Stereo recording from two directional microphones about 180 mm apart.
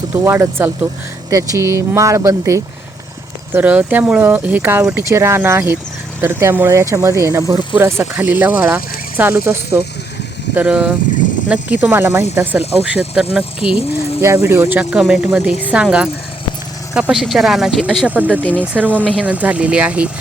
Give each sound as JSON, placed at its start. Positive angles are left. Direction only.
{"t": 0.1, "sound": "speech", "side_deg": -15}